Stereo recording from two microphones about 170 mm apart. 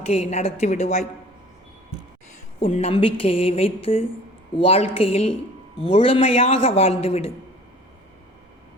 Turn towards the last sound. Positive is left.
turn(degrees=35)  # may be behind; listen again after turning